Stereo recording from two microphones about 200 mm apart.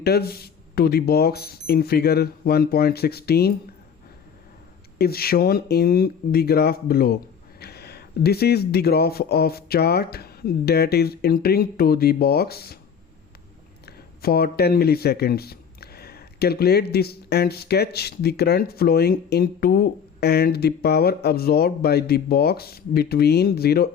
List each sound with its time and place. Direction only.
0.0 s speech: 50° left (ahead or behind)
4.9 s speech: 50° left (ahead or behind)
13.8 s speech: 50° left (ahead or behind)